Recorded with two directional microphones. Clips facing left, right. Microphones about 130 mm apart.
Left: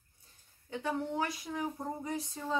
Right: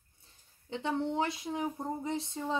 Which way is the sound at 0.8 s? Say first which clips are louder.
Right 3 dB; 25° right (ahead or behind).